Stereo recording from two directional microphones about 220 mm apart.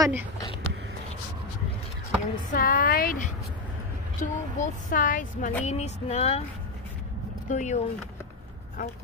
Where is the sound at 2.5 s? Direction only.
40° left (ahead or behind).